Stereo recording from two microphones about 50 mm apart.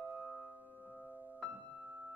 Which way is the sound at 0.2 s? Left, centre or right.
Centre.